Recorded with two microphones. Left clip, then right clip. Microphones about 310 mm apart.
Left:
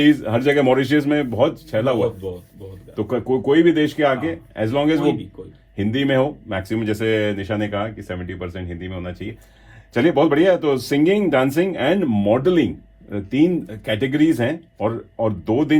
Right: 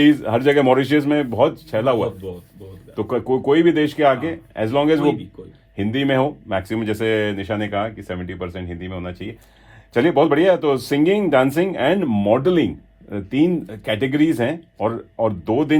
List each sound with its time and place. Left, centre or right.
0.0 s speech: right